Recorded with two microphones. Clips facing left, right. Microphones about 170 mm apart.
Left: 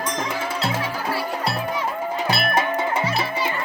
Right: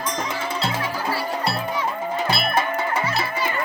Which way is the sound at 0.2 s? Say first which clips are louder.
Left 1 dB; 5° left (ahead or behind).